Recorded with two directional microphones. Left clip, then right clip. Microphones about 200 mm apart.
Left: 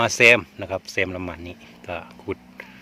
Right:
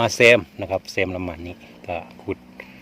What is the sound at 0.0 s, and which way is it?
Speech, 5° right (ahead or behind).